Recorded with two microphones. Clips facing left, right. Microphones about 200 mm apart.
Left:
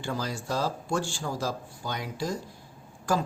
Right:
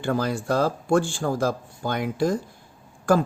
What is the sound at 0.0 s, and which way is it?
Speech, 55° right (ahead or behind).